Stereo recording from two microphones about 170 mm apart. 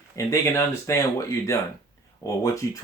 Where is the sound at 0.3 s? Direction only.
15° left (ahead or behind).